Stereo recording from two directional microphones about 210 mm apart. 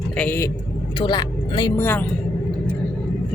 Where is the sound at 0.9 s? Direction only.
20° left (ahead or behind).